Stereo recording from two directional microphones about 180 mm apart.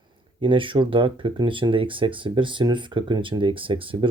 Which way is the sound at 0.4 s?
30° right (ahead or behind).